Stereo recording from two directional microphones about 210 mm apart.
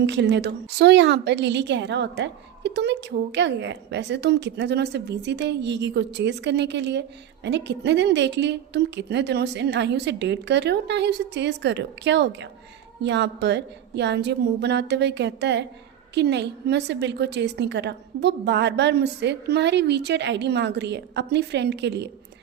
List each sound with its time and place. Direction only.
0.0 s a woman's voice: 55° right (ahead or behind)